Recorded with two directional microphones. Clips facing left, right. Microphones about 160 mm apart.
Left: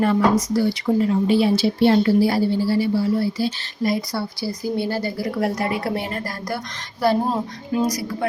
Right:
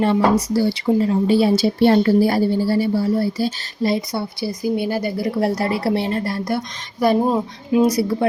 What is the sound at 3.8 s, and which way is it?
A woman's voice, 25° right (ahead or behind).